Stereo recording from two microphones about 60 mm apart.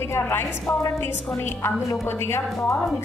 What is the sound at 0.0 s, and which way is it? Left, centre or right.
Speech, left.